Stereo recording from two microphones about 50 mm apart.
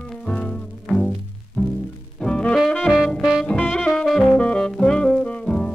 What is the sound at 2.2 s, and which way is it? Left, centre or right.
Brass instrument, left.